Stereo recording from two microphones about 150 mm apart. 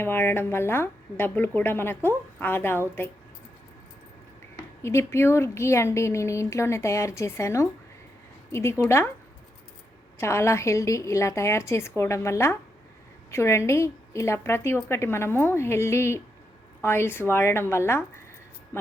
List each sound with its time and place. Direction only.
0.0 s a woman's voice: 15° left (ahead or behind)
4.8 s speech: 15° left (ahead or behind)
8.8 s a woman's voice: 15° left (ahead or behind)
10.2 s a woman's voice: 15° left (ahead or behind)
18.7 s a sound: 15° left (ahead or behind)